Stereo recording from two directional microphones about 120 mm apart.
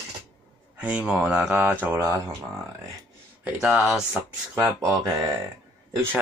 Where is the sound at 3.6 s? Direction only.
5° right (ahead or behind).